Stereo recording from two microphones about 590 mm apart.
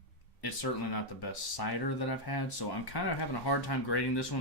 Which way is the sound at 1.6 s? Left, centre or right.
Left.